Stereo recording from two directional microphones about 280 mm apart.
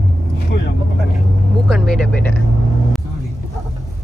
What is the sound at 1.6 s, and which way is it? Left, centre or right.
Speech, centre.